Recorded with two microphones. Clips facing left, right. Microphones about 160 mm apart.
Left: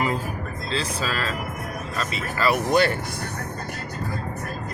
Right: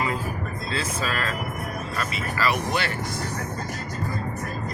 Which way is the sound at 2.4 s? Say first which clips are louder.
Left 6 dB; 40° left (ahead or behind).